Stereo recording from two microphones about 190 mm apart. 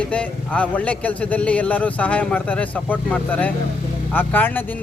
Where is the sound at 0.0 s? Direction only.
5° left (ahead or behind).